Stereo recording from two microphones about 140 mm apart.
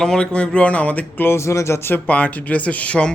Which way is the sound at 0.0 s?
5° left (ahead or behind).